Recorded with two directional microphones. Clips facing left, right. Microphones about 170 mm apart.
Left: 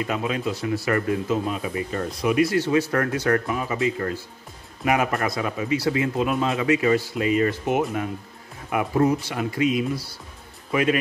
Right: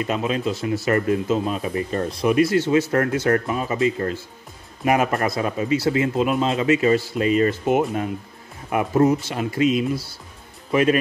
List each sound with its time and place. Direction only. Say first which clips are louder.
0.0 s a man's voice: right 2 dB; 25° right (ahead or behind)
1.7 s a man's voice: right 3 dB; 35° right (ahead or behind)